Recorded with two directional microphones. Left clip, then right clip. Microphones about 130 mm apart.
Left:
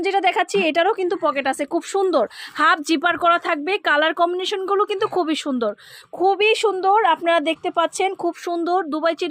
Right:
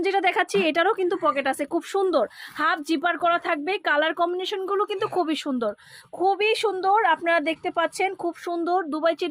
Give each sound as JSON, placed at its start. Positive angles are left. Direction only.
{"t": 0.0, "sound": "a woman's voice", "side_deg": 25}
{"t": 8.2, "sound": "a woman's voice", "side_deg": 40}